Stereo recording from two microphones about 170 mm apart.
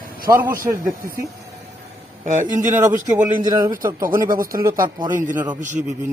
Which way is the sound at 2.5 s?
45° right (ahead or behind).